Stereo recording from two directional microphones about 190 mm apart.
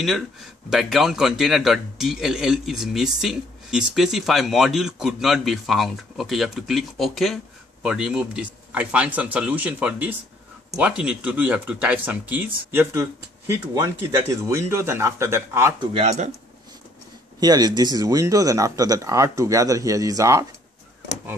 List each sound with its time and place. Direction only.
0.7 s a man's voice: centre (ahead or behind)
13.7 s speech: 15° right (ahead or behind)
15.9 s speech: 35° right (ahead or behind)
17.4 s speech: 20° right (ahead or behind)